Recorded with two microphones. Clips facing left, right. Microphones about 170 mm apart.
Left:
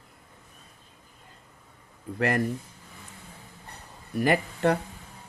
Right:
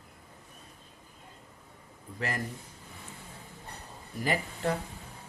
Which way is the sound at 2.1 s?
65° left (ahead or behind).